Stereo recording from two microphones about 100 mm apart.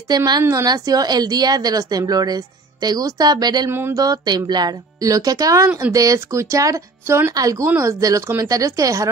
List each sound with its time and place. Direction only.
0.1 s a woman's voice: 45° right (ahead or behind)
0.4 s a woman's voice: 30° right (ahead or behind)
5.7 s speech: 20° right (ahead or behind)
5.9 s a woman's voice: 30° right (ahead or behind)